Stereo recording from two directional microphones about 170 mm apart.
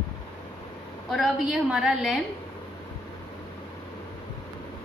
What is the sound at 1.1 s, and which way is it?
A woman's voice, centre (ahead or behind).